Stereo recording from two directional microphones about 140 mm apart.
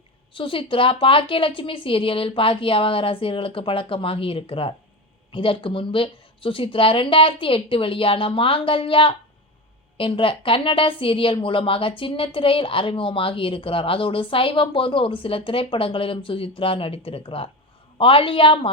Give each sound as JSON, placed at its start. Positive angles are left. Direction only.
{"t": 0.3, "sound": "a woman's voice", "side_deg": 40}